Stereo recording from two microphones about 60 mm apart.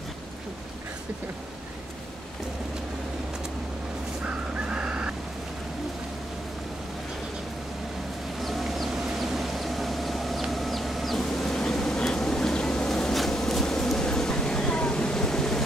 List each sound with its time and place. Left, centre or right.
4.6 s fowl: centre
8.4 s chicken: centre